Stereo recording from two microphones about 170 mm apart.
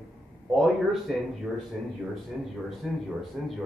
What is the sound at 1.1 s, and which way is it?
Speech, centre (ahead or behind).